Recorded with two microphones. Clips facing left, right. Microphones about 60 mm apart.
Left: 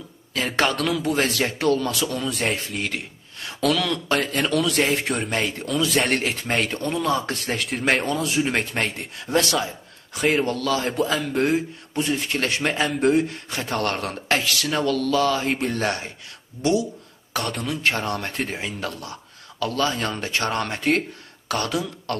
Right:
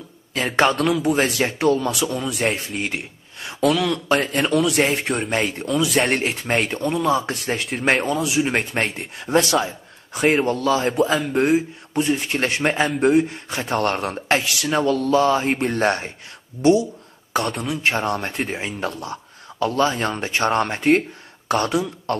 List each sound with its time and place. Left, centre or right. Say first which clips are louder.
0.3 s a man's voice: right 4 dB; right
7.5 s speech: right 2 dB; centre
8.8 s speech: right 2 dB; right
11.1 s speech: right 3 dB; centre
12.9 s speech: right 1 dB; centre
13.5 s speech: right 3 dB; right
17.4 s speech: right 3 dB; centre
17.8 s speech: right 3 dB; right